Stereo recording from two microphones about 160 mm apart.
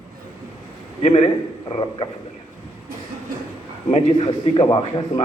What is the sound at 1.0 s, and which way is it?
Speech, 40° left (ahead or behind).